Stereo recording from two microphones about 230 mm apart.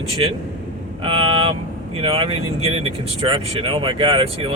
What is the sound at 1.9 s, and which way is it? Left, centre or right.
Speech, right.